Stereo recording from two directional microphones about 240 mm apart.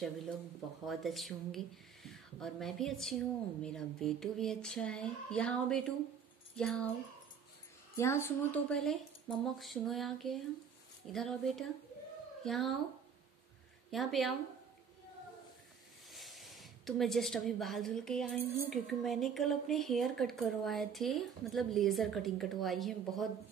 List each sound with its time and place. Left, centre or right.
0.8 s speech: centre
7.9 s speech: centre
13.8 s a woman's voice: centre
16.1 s speech: centre